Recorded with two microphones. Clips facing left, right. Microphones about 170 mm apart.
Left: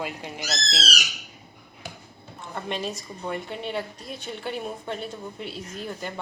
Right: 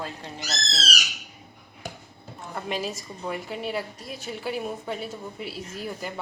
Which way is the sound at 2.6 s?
5° right (ahead or behind).